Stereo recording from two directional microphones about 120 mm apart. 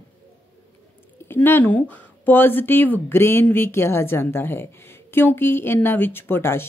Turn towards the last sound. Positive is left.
turn(degrees=20)  # may be behind; listen again after turning